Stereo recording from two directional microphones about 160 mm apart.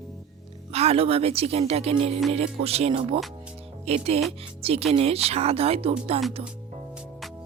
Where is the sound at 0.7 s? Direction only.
40° right (ahead or behind).